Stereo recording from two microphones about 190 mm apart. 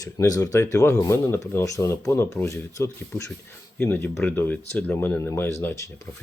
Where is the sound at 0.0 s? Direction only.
20° left (ahead or behind).